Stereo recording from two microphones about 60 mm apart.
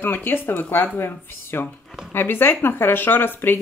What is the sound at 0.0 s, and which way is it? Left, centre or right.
Speech, left.